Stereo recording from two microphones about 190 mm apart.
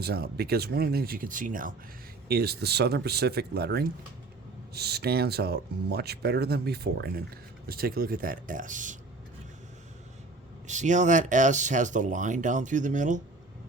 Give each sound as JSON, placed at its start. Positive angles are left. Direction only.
{"t": 0.0, "sound": "speech", "side_deg": -55}
{"t": 2.2, "sound": "speech", "side_deg": -55}
{"t": 10.7, "sound": "speech", "side_deg": -40}